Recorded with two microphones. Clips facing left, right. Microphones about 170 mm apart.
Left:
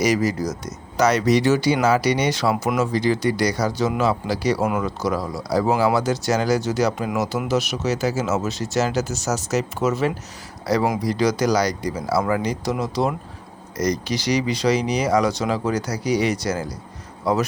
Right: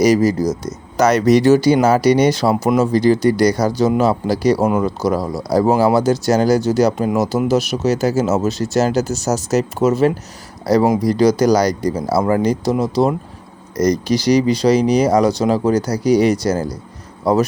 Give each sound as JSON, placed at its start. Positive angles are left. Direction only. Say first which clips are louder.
{"t": 0.0, "sound": "speech", "louder": "right 7 dB", "side_deg": -35}
{"t": 1.0, "sound": "speech", "louder": "right 6 dB", "side_deg": -45}